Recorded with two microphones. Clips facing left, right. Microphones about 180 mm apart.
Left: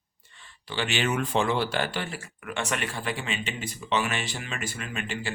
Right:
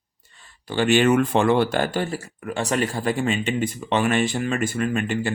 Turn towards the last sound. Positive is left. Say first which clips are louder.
# right 11 dB
turn(degrees=-50)  # may be behind; listen again after turning